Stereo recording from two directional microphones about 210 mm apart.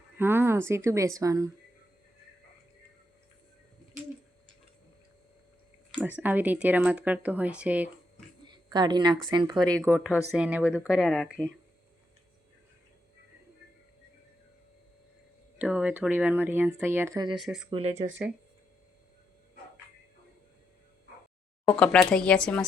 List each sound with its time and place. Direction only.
0.2 s speech: 10° right (ahead or behind)
6.0 s speech: 10° right (ahead or behind)
8.4 s a sound: 20° right (ahead or behind)
9.8 s speech: 10° right (ahead or behind)
15.5 s speech: 5° right (ahead or behind)
17.3 s speech: centre (ahead or behind)
17.7 s speech: 25° right (ahead or behind)
21.6 s speech: 5° left (ahead or behind)